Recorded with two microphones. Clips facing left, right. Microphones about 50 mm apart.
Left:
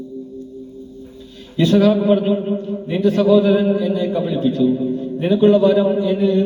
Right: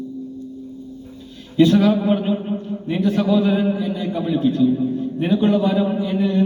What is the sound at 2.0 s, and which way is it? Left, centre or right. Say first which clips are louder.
Speech: left 4 dB; centre.